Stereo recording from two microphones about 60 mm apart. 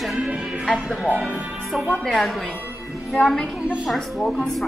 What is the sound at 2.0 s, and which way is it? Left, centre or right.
Speech, centre.